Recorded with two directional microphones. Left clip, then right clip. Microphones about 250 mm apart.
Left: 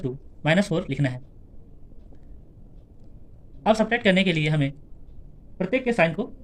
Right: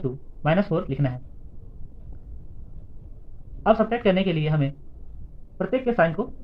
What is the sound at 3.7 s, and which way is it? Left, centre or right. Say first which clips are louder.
Speech: right 1 dB; left.